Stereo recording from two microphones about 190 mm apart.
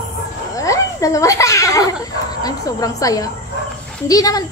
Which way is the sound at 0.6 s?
15° left (ahead or behind).